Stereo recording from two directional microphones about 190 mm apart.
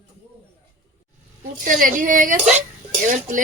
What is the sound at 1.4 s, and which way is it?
Speech, 45° right (ahead or behind).